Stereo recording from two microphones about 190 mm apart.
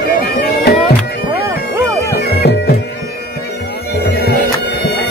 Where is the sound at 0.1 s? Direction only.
50° left (ahead or behind).